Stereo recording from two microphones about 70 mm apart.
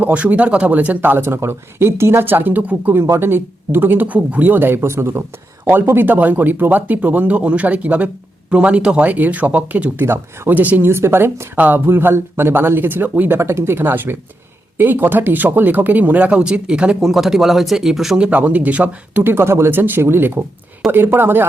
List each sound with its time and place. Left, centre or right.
0.0 s speech: right
1.1 s speech: right
3.0 s speech: right
10.5 s speech: right
10.8 s speech: right
11.5 s speech: right
17.0 s speech: centre
18.3 s speech: right